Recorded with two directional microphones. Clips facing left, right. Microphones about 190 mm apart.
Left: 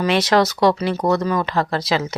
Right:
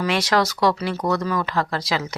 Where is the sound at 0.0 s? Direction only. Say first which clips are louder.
Left 4 dB; 25° left (ahead or behind).